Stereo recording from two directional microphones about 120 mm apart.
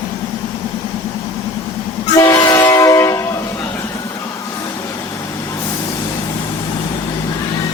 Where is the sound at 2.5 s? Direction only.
25° left (ahead or behind).